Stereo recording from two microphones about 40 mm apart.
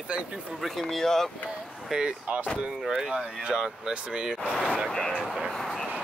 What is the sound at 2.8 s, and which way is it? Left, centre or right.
Speech, centre.